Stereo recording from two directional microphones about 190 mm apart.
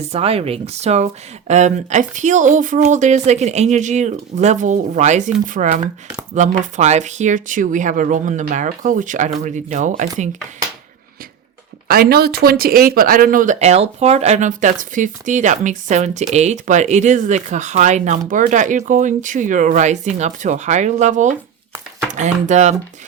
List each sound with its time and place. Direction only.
0.0 s speech: 30° right (ahead or behind)
11.9 s speech: 55° right (ahead or behind); by 22.7 s 40° right (ahead or behind)